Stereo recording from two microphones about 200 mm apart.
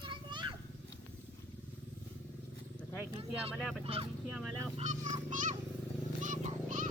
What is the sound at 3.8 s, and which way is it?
Vehicle, 30° right (ahead or behind).